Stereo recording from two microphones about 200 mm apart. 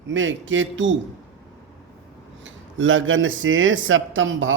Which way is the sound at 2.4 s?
70° right (ahead or behind).